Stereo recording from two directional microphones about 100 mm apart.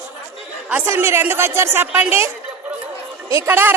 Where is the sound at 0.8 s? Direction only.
25° right (ahead or behind).